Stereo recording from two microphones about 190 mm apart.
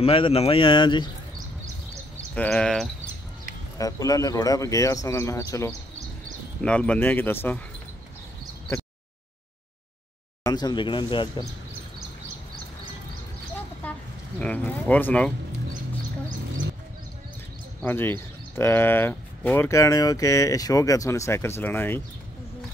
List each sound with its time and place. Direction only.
0.0 s speech: 30° left (ahead or behind)
2.3 s speech: 5° left (ahead or behind)
3.7 s speech: 20° left (ahead or behind)
10.4 s speech: 20° left (ahead or behind)
13.8 s a sound: 10° left (ahead or behind)
14.4 s speech: 10° left (ahead or behind)
17.8 s speech: 10° left (ahead or behind)